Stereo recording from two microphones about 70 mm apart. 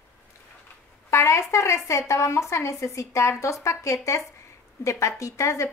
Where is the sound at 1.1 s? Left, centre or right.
Left.